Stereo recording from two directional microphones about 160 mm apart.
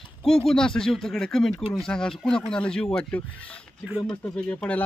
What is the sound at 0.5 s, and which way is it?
A man's voice, 5° left (ahead or behind).